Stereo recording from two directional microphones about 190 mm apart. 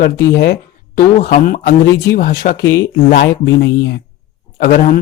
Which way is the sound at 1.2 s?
45° left (ahead or behind).